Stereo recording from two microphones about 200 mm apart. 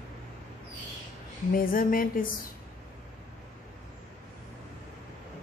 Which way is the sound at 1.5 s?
45° left (ahead or behind).